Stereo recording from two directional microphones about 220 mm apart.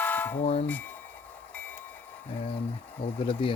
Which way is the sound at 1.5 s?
5° left (ahead or behind).